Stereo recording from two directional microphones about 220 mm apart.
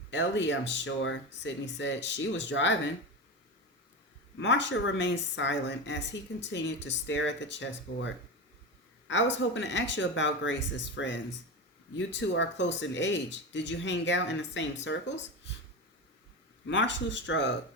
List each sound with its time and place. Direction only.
0.1 s speech: 55° left (ahead or behind)
4.4 s speech: 55° left (ahead or behind)
16.6 s speech: 55° left (ahead or behind)